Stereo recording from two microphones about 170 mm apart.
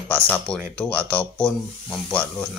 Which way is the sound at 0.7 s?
10° left (ahead or behind).